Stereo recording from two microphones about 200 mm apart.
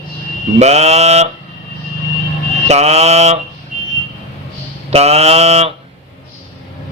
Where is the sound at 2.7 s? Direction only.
35° right (ahead or behind).